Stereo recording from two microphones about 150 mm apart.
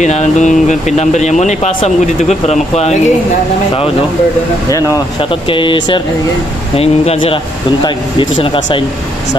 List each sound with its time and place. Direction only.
0.0 s speech: 50° left (ahead or behind)
4.6 s speech: 20° left (ahead or behind)
5.5 s speech: 35° left (ahead or behind)